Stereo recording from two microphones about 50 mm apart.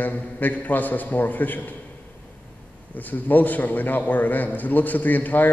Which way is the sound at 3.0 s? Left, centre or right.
Left.